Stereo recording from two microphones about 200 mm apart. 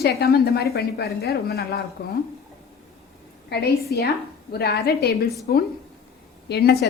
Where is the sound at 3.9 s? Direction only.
50° left (ahead or behind).